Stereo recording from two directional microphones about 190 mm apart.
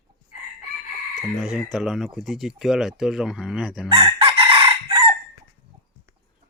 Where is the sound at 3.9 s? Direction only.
25° right (ahead or behind).